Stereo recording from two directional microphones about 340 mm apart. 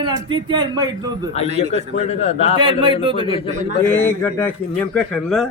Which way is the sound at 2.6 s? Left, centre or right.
Centre.